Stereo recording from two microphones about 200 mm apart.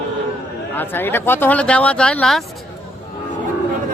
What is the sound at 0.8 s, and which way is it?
Speech, 10° left (ahead or behind).